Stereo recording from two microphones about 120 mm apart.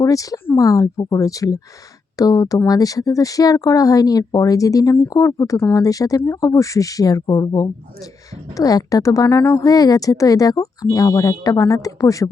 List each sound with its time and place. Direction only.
0.0 s speech: 30° left (ahead or behind)